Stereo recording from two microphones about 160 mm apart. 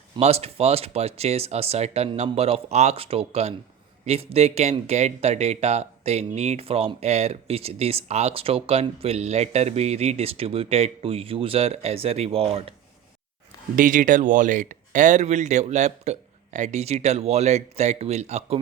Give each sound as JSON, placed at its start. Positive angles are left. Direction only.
{"t": 0.2, "sound": "speech", "side_deg": -40}
{"t": 13.7, "sound": "speech", "side_deg": -55}